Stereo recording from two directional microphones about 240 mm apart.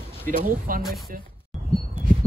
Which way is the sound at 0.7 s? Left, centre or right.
Right.